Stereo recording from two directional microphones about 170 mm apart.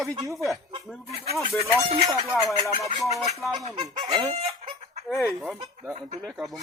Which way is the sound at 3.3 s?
Centre (ahead or behind).